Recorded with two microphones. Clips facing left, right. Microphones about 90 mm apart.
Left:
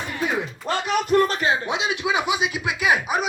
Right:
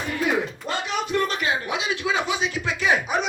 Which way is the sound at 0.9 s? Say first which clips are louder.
Left 6 dB; 45° left (ahead or behind).